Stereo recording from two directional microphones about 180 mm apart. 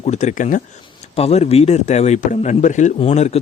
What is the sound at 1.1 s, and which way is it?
A man's voice, 35° left (ahead or behind).